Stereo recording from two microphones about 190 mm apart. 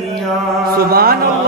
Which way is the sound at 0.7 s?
50° right (ahead or behind).